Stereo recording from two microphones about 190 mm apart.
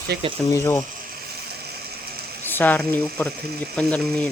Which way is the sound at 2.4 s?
10° left (ahead or behind).